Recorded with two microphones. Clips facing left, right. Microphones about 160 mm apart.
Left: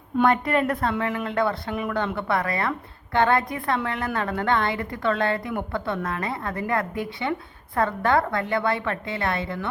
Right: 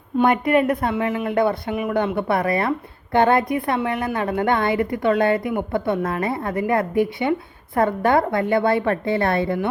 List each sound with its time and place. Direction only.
0.2 s speech: 15° right (ahead or behind)
8.8 s a woman's voice: 45° right (ahead or behind)